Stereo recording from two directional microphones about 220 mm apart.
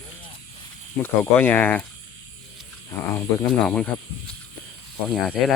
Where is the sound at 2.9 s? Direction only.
15° left (ahead or behind).